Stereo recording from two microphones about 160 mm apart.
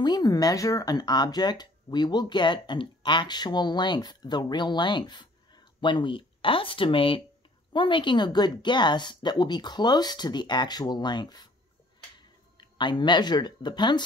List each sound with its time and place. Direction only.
0.0 s speech: 25° left (ahead or behind)
12.5 s speech: 30° left (ahead or behind)